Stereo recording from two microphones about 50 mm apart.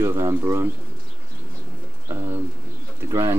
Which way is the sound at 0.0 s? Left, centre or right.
Right.